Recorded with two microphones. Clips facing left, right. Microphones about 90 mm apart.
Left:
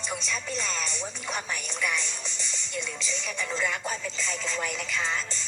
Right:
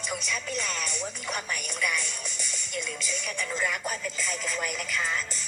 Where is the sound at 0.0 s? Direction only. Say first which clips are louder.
Even; 30° left (ahead or behind).